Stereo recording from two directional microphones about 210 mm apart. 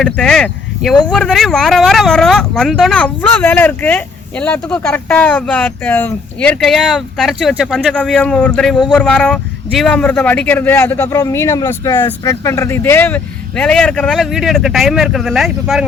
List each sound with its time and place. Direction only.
0.0 s speech: 5° left (ahead or behind)